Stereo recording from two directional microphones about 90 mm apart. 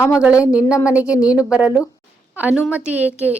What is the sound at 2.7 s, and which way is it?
Speech, 15° right (ahead or behind).